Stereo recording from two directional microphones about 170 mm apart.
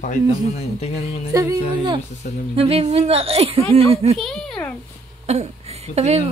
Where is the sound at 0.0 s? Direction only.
45° left (ahead or behind).